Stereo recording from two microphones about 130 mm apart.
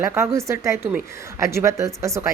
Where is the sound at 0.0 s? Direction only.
20° right (ahead or behind).